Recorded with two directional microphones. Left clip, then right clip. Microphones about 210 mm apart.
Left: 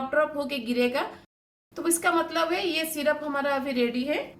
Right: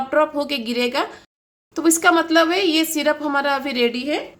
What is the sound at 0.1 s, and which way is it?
A woman's voice, 55° right (ahead or behind).